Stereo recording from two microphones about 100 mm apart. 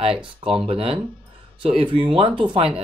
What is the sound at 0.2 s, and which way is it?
Speech, 60° right (ahead or behind).